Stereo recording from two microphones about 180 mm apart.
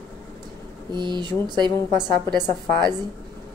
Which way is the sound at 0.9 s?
25° right (ahead or behind).